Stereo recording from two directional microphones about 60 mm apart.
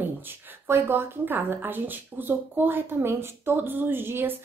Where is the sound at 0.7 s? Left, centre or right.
Right.